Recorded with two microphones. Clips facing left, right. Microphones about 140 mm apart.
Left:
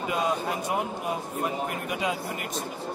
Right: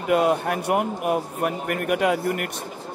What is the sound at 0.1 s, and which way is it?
Speech, 60° right (ahead or behind).